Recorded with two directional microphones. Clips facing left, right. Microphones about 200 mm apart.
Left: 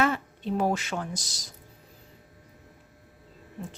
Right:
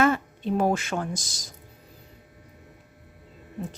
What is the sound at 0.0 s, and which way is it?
Speech, 50° right (ahead or behind).